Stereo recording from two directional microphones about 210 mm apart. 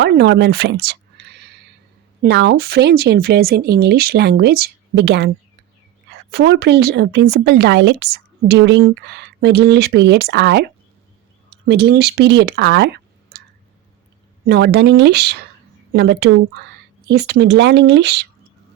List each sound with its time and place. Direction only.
0.0 s a sound: 55° right (ahead or behind)
2.2 s a woman's voice: 55° right (ahead or behind)
11.7 s a woman's voice: 50° right (ahead or behind)
14.4 s a woman's voice: 50° right (ahead or behind)